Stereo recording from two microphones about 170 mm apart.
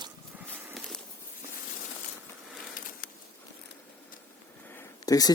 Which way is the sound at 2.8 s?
55° left (ahead or behind).